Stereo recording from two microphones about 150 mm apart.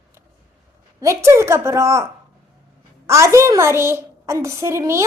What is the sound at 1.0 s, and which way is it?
A woman's voice, 20° right (ahead or behind).